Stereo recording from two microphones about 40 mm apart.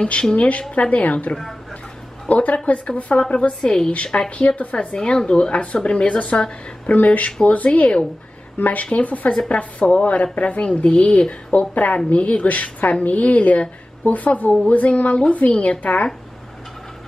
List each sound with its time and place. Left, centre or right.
0.0 s a woman's voice: left
4.9 s speech: left
6.9 s a woman's voice: left
8.5 s a woman's voice: left